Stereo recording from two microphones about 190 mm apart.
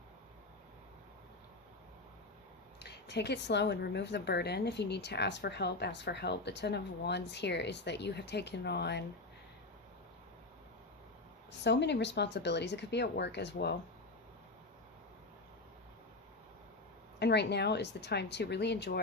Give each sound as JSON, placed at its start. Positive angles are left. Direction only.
{"t": 2.7, "sound": "speech", "side_deg": 60}
{"t": 11.6, "sound": "speech", "side_deg": 65}
{"t": 17.2, "sound": "speech", "side_deg": 60}